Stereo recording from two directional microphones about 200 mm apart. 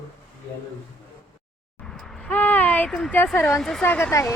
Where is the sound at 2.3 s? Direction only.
10° left (ahead or behind).